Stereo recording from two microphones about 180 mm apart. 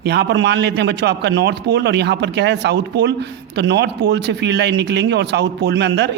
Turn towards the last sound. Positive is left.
turn(degrees=-70)  # may be behind; listen again after turning